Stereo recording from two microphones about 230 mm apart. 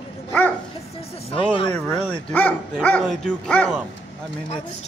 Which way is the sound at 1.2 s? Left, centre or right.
Left.